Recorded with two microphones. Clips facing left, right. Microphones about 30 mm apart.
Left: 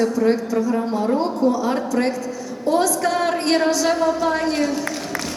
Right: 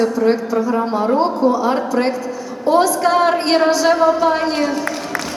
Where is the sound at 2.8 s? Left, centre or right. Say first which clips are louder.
Right 5 dB; centre.